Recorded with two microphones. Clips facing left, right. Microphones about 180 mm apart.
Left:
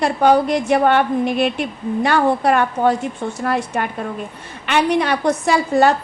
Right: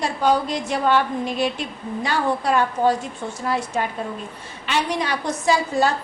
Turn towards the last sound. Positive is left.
turn(degrees=65)  # may be behind; listen again after turning